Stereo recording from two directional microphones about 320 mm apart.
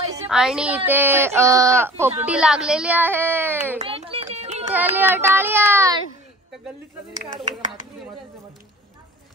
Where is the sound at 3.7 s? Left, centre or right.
Centre.